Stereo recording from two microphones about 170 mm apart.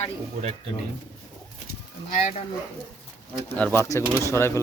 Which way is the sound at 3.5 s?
10° left (ahead or behind).